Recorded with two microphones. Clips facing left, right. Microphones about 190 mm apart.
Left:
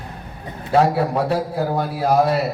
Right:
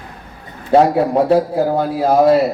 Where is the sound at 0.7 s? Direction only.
20° right (ahead or behind).